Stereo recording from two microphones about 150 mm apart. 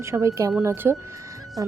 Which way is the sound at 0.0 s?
20° right (ahead or behind).